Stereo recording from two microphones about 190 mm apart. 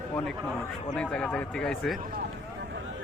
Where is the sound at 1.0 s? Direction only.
5° left (ahead or behind).